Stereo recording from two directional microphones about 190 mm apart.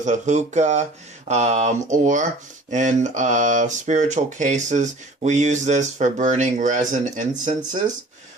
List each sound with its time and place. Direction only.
0.0 s speech: 40° right (ahead or behind)